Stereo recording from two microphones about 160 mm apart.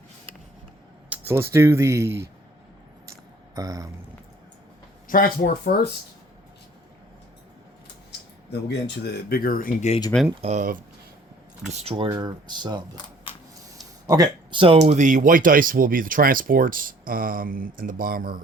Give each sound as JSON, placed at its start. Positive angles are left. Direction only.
{"t": 1.1, "sound": "speech", "side_deg": -15}
{"t": 3.5, "sound": "speech", "side_deg": -20}
{"t": 5.0, "sound": "speech", "side_deg": 65}
{"t": 8.4, "sound": "speech", "side_deg": 90}
{"t": 10.4, "sound": "speech", "side_deg": -50}
{"t": 12.1, "sound": "speech", "side_deg": -30}
{"t": 14.1, "sound": "speech", "side_deg": -30}